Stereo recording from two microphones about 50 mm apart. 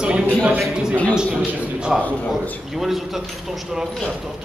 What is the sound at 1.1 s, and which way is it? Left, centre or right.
Speech, centre.